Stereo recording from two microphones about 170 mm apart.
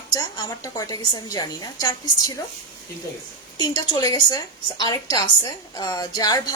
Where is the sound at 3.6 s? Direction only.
25° left (ahead or behind).